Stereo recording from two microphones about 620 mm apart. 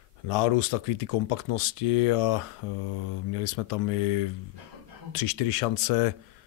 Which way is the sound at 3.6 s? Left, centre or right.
Left.